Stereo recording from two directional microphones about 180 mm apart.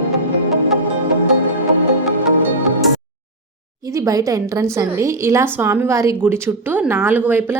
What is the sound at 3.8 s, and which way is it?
A woman's voice, 20° right (ahead or behind).